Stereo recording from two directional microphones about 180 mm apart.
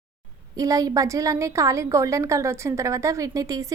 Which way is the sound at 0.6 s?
20° right (ahead or behind).